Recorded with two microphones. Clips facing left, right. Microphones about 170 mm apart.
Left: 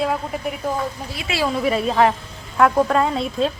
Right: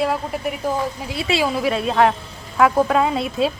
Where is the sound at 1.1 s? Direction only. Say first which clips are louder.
Right 6 dB; 30° right (ahead or behind).